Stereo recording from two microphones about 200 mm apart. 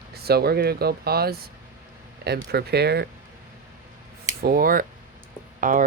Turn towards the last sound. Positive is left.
turn(degrees=-40)  # may be behind; listen again after turning